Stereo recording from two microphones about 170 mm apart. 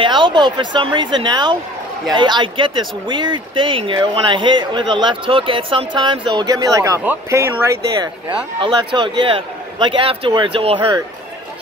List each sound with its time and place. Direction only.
0.0 s speech: 30° right (ahead or behind)
8.5 s speech: 30° right (ahead or behind)